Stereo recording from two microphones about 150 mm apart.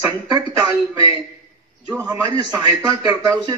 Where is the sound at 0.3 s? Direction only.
25° right (ahead or behind).